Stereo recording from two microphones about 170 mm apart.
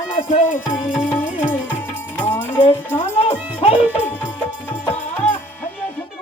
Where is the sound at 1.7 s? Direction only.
45° left (ahead or behind).